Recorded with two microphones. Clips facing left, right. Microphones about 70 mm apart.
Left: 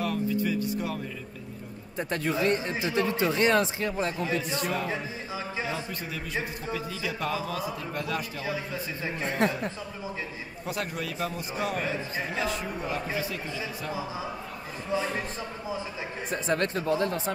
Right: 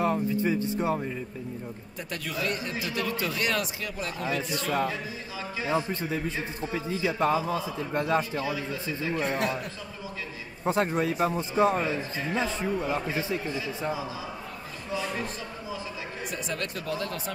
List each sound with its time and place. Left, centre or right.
0.0 s music: right
2.0 s speech: left
5.7 s a man's voice: right
8.5 s speech: left
10.6 s a man's voice: right
14.9 s speech: left
16.3 s speech: left